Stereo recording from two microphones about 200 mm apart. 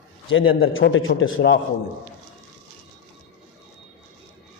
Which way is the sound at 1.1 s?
70° left (ahead or behind).